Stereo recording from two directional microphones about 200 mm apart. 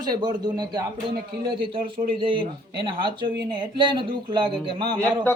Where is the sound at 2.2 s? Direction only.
25° right (ahead or behind).